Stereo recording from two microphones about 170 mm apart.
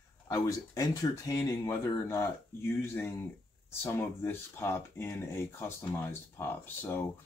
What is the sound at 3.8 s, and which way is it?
Speech, 15° left (ahead or behind).